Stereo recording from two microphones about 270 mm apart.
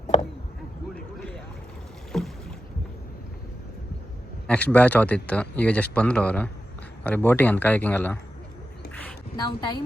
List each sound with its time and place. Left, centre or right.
2.1 s boat: centre
4.4 s a man's voice: centre
9.4 s speech: centre